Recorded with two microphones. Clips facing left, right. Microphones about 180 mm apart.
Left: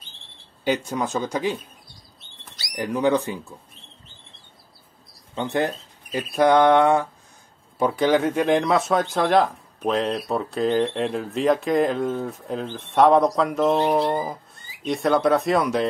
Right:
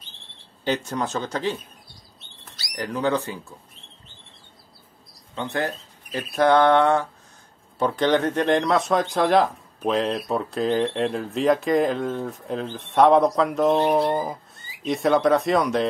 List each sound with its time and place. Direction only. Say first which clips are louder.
0.7 s speech: left 1 dB; 10° left (ahead or behind)
2.6 s speech: left 3 dB; 15° left (ahead or behind)
5.3 s speech: left 3 dB; 20° left (ahead or behind); by 15.9 s centre (ahead or behind)